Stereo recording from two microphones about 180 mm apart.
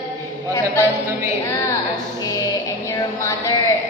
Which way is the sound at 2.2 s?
20° left (ahead or behind).